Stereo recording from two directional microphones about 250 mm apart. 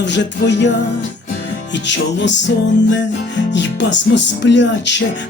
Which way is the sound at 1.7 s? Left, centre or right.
Left.